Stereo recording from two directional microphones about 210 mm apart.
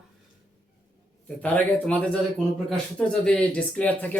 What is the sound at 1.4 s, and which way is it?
A man's voice, 5° left (ahead or behind).